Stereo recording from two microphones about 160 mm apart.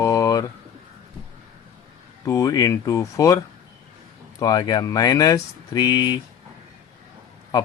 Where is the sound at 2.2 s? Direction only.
20° left (ahead or behind).